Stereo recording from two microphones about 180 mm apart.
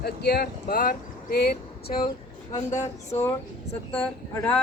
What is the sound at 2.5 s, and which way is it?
Speech, 40° left (ahead or behind).